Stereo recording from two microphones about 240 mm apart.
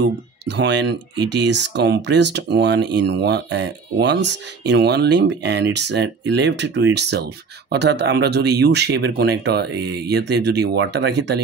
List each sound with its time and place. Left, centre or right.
0.0 s speech: right